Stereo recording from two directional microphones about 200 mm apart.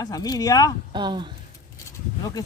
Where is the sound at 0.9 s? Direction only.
25° right (ahead or behind).